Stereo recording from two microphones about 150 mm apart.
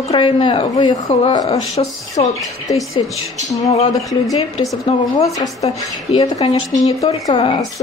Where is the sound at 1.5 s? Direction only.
45° left (ahead or behind).